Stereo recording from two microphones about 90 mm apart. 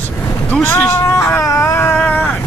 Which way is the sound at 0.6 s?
25° left (ahead or behind).